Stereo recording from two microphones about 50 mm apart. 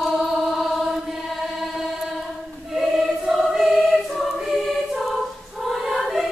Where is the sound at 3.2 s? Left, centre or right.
Centre.